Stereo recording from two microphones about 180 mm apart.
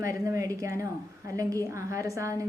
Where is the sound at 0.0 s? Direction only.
15° right (ahead or behind).